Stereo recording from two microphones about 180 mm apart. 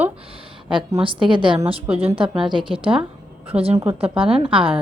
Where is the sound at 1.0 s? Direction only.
30° right (ahead or behind).